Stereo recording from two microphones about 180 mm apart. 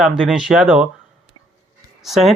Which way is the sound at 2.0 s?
Centre (ahead or behind).